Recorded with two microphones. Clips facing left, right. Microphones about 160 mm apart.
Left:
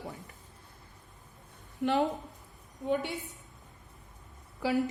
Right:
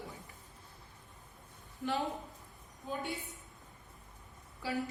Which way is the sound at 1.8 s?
70° left (ahead or behind).